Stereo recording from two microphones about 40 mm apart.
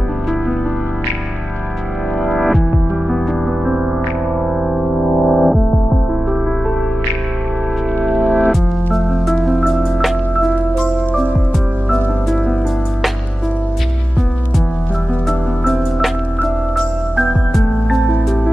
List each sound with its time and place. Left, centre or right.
4.8 s music: centre
8.5 s music: centre
11.9 s music: centre
15.2 s music: centre